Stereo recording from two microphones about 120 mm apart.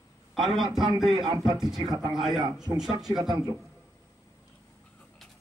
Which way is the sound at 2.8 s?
35° right (ahead or behind).